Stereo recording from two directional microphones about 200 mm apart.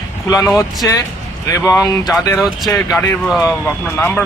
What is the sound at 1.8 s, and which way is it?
Speech, 20° left (ahead or behind).